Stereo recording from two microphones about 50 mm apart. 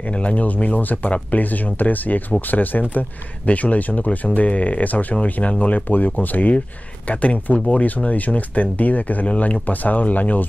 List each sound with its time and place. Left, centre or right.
0.1 s speech: left